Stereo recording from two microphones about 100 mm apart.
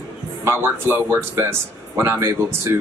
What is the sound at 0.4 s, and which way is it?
Speech, 25° right (ahead or behind).